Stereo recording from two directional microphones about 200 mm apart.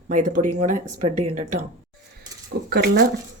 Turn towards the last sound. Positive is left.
turn(degrees=-55)  # may be behind; listen again after turning